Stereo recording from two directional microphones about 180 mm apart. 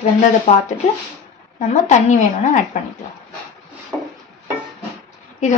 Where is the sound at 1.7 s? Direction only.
40° left (ahead or behind).